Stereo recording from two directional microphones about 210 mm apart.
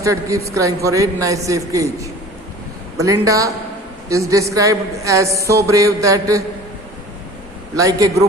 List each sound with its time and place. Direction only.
0.0 s a woman's voice: 15° right (ahead or behind)
7.8 s a woman's voice: 15° right (ahead or behind)